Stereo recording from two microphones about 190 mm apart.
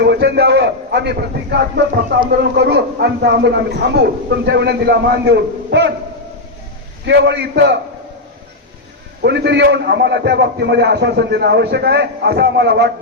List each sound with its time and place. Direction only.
0.0 s a man's voice: 60° right (ahead or behind)
7.0 s a man's voice: 65° right (ahead or behind)
9.2 s a man's voice: 65° right (ahead or behind)